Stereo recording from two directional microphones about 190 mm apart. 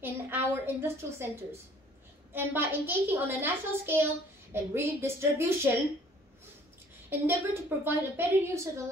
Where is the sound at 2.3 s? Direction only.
10° right (ahead or behind).